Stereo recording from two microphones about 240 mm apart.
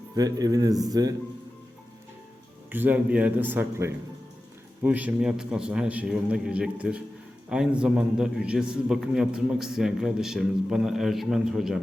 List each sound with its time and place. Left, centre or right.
0.2 s speech: centre
2.6 s a man's voice: centre